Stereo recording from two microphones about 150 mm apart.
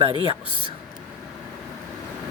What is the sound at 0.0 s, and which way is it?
Speech, 35° right (ahead or behind).